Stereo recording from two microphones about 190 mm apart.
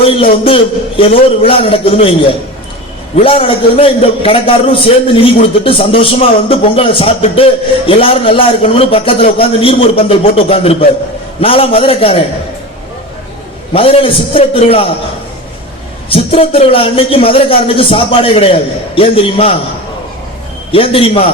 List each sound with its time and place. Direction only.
0.0 s a man's voice: 30° left (ahead or behind)
3.2 s a man's voice: 30° left (ahead or behind)
13.7 s a man's voice: 30° left (ahead or behind)
16.0 s a man's voice: 30° left (ahead or behind)
20.7 s a man's voice: 30° left (ahead or behind)